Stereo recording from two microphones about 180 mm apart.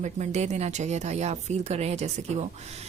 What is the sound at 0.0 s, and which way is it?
A woman's voice, 40° right (ahead or behind).